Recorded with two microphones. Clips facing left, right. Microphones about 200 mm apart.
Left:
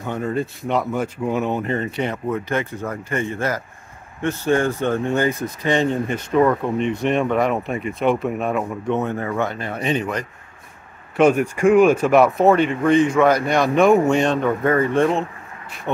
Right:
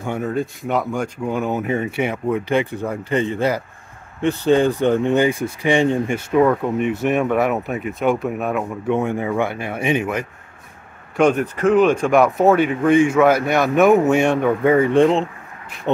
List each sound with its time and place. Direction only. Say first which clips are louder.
0.0 s speech: right 1 dB; 5° right (ahead or behind)
11.1 s speech: left 1 dB; 10° left (ahead or behind); by 15.2 s 20° right (ahead or behind)